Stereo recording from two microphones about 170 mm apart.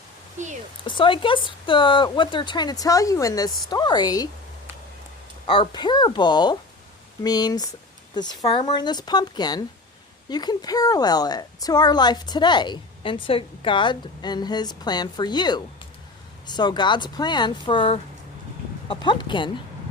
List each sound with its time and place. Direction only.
0.4 s a sound: 45° right (ahead or behind)
0.9 s a woman's voice: 30° left (ahead or behind)
5.5 s a woman's voice: 25° left (ahead or behind)